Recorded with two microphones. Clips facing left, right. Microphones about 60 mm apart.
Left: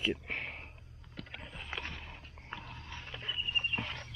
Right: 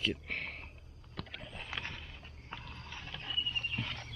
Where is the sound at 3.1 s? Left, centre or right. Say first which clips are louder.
Left 2 dB; left.